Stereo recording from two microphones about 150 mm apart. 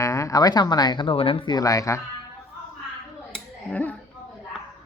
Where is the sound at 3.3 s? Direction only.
10° left (ahead or behind).